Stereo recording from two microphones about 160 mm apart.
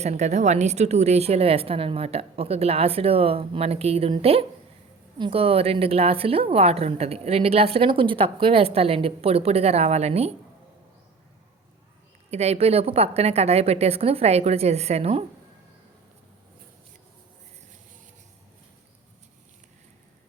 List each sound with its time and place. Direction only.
0.0 s a woman's voice: 45° right (ahead or behind)
12.3 s a woman's voice: 40° right (ahead or behind)